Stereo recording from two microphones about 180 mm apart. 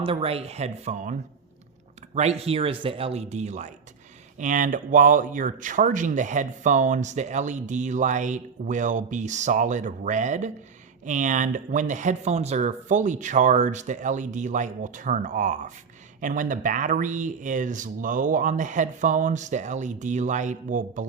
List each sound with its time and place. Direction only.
0.0 s speech: 30° right (ahead or behind)
2.1 s speech: 35° right (ahead or behind)